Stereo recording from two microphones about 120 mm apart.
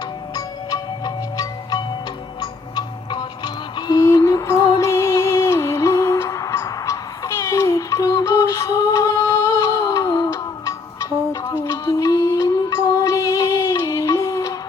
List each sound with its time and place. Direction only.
0.3 s music: 35° left (ahead or behind)
9.6 s a sound: 25° left (ahead or behind)
10.2 s music: 20° left (ahead or behind)